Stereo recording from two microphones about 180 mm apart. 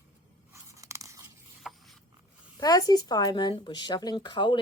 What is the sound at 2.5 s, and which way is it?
A woman's voice, 20° left (ahead or behind).